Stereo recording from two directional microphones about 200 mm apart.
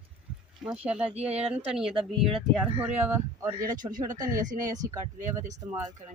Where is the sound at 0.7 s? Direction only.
5° right (ahead or behind).